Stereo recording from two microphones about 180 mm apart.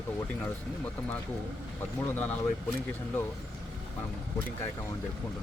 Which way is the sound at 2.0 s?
10° left (ahead or behind).